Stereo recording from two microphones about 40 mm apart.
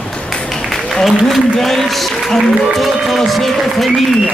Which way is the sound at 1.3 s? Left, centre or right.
Centre.